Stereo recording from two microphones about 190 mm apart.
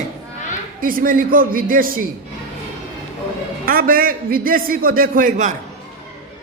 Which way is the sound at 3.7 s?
50° right (ahead or behind).